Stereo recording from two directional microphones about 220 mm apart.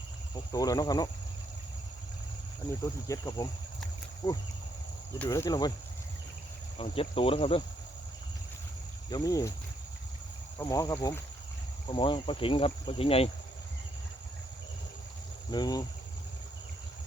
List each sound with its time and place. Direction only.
0.5 s speech: 15° left (ahead or behind)
3.1 s speech: 15° left (ahead or behind)
6.7 s speech: 25° left (ahead or behind)
9.0 s speech: 15° left (ahead or behind)
10.6 s speech: 15° left (ahead or behind)
15.4 s speech: 15° left (ahead or behind)